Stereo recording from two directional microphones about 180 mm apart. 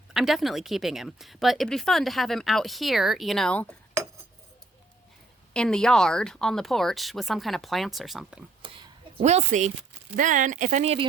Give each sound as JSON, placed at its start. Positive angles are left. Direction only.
{"t": 0.1, "sound": "a woman's voice", "side_deg": 0}
{"t": 5.5, "sound": "a woman's voice", "side_deg": 5}
{"t": 8.6, "sound": "a sound", "side_deg": -30}
{"t": 9.2, "sound": "speech", "side_deg": -40}